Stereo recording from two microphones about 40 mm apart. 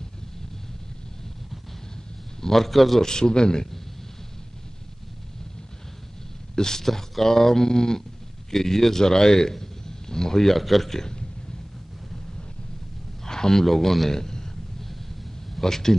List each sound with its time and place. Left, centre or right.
2.4 s a man's voice: centre
3.1 s a man's voice: centre
6.5 s a man's voice: centre
13.2 s a man's voice: centre
15.6 s speech: centre